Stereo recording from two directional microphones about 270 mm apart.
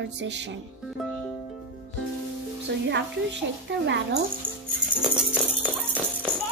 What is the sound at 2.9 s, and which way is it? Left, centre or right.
A woman's voice, right.